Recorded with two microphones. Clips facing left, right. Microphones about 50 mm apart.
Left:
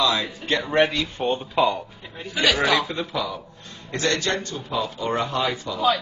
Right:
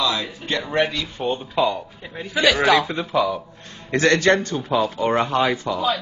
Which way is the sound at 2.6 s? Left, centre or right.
Centre.